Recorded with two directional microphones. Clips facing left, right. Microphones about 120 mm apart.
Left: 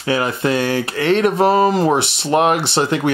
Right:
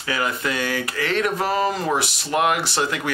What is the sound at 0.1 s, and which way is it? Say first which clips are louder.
Speech: left 7 dB; 30° left (ahead or behind).